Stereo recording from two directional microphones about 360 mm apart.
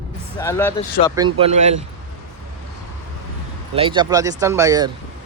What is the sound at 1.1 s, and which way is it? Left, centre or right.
Speech, centre.